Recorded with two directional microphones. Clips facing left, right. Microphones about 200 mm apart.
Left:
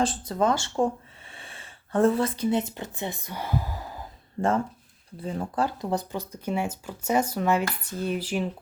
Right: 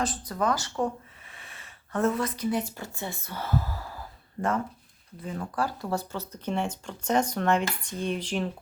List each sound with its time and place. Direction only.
0.0 s speech: 25° left (ahead or behind)
4.4 s speech: 30° left (ahead or behind); by 8.4 s 5° left (ahead or behind)